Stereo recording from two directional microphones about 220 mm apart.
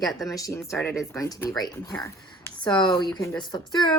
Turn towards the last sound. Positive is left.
turn(degrees=20)  # may be behind; listen again after turning